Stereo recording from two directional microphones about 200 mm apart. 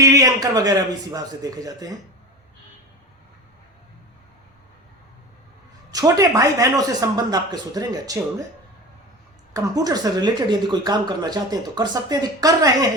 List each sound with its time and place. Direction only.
0.0 s speech: 15° right (ahead or behind)
5.9 s speech: 20° right (ahead or behind)
9.5 s speech: 15° right (ahead or behind)